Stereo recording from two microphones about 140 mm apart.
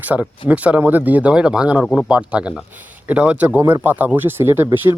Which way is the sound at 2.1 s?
10° right (ahead or behind).